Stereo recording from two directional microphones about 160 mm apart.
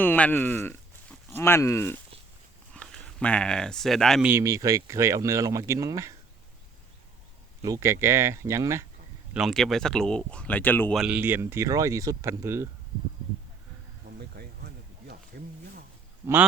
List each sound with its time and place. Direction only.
0.0 s speech: 10° left (ahead or behind)
4.3 s speech: 15° right (ahead or behind)
7.6 s speech: 20° right (ahead or behind)
9.3 s speech: centre (ahead or behind)
10.9 s speech: 5° right (ahead or behind)
14.2 s a sound: 85° right